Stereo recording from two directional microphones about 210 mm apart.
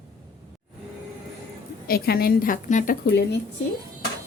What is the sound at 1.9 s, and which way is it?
A woman's voice, 45° left (ahead or behind).